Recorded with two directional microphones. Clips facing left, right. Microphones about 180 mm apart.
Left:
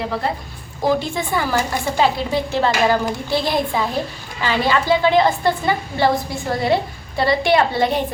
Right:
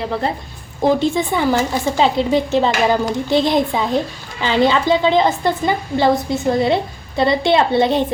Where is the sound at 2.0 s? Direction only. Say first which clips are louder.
Right 3 dB; 20° right (ahead or behind).